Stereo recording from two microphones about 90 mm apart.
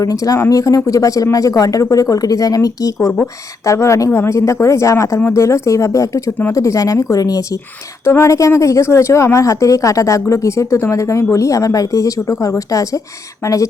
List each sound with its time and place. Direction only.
0.0 s speech: 40° left (ahead or behind)
8.0 s speech: 30° left (ahead or behind)